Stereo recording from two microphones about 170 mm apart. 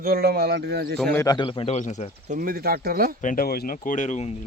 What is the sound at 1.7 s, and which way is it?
Speech, 45° left (ahead or behind).